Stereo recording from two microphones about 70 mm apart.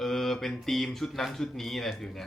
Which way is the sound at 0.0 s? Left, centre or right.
Centre.